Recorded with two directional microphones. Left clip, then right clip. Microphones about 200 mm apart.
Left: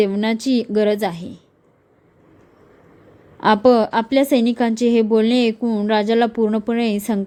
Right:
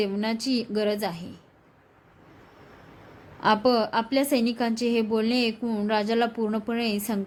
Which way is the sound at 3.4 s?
30° left (ahead or behind).